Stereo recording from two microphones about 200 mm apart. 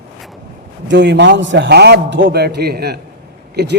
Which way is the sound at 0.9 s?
60° right (ahead or behind).